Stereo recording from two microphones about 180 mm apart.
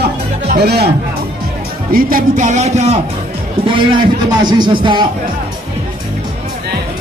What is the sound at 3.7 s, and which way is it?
A man's voice, 25° right (ahead or behind).